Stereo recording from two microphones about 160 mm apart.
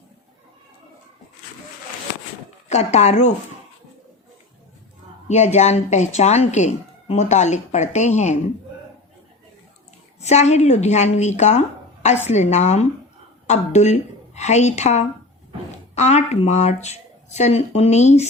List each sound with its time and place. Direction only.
2.6 s speech: 45° left (ahead or behind)
5.3 s speech: 45° left (ahead or behind)
10.2 s a woman's voice: 45° left (ahead or behind)